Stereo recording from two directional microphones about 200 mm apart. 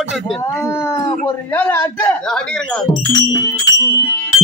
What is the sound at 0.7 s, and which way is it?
Speech, 15° left (ahead or behind).